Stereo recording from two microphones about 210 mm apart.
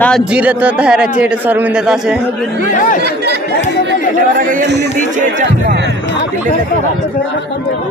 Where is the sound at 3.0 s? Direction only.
50° right (ahead or behind).